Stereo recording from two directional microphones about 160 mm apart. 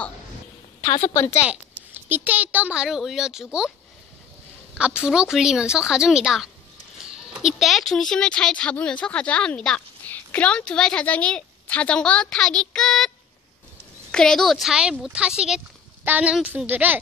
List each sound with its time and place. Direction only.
0.8 s a woman's voice: 45° left (ahead or behind)
1.4 s a child's voice: 10° right (ahead or behind)
4.7 s speech: 5° right (ahead or behind)
14.1 s a woman's voice: 5° left (ahead or behind)